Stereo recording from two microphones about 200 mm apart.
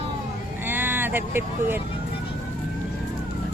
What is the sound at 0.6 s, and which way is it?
Vehicle, 10° right (ahead or behind).